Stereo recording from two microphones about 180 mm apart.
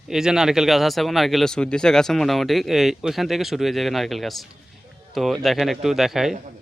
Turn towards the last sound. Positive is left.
turn(degrees=0)  # may be behind; listen again after turning